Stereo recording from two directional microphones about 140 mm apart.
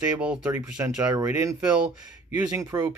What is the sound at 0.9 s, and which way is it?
Speech, 25° right (ahead or behind).